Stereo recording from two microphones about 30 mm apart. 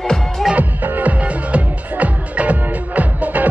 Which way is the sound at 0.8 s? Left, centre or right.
Right.